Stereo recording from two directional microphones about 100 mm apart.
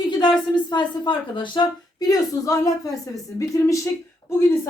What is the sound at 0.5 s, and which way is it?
Speech, 50° left (ahead or behind).